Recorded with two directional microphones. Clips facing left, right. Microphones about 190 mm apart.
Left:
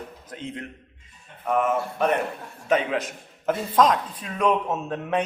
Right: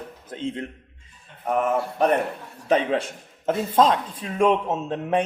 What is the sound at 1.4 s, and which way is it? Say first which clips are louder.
A man's voice: even; 35° right (ahead or behind).